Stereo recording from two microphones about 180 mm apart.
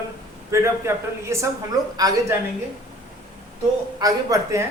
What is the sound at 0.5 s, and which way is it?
A man's voice, 15° right (ahead or behind).